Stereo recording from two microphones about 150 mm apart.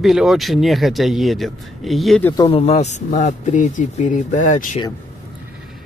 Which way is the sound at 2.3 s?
35° left (ahead or behind).